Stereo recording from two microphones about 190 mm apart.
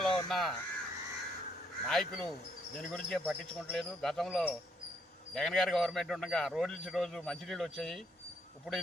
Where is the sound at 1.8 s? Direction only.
5° left (ahead or behind).